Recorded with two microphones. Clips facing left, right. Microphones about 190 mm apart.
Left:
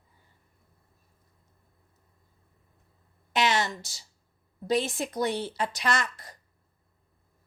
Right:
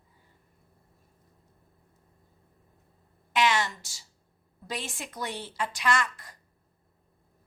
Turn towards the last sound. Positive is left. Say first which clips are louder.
# right 1 dB
turn(degrees=40)  # may be behind; listen again after turning